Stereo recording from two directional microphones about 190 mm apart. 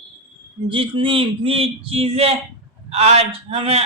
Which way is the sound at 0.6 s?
25° right (ahead or behind).